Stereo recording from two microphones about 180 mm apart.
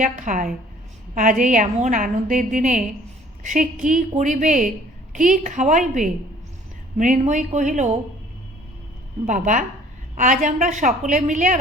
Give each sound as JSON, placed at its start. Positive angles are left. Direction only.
{"t": 0.0, "sound": "a woman's voice", "side_deg": -45}
{"t": 9.2, "sound": "a woman's voice", "side_deg": -45}